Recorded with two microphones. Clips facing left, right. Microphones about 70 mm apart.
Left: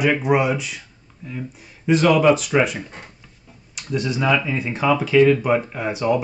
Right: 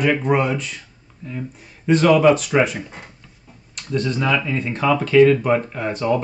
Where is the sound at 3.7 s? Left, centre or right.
Centre.